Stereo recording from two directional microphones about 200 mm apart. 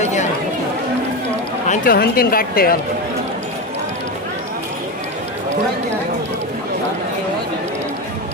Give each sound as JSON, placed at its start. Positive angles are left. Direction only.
{"t": 1.7, "sound": "a woman's voice", "side_deg": 45}